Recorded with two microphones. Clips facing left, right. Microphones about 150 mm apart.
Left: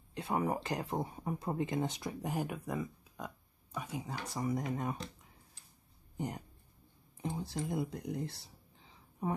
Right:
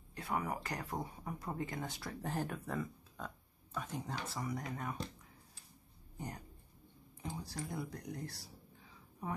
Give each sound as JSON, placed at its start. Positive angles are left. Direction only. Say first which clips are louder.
{"t": 0.1, "sound": "speech", "louder": "left 5 dB", "side_deg": 25}
{"t": 6.1, "sound": "speech", "louder": "left 7 dB", "side_deg": 20}